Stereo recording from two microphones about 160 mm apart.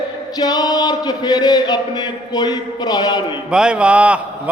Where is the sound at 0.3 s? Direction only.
25° left (ahead or behind).